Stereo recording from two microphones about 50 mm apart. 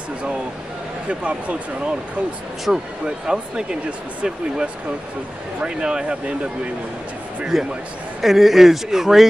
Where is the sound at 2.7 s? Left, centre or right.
Centre.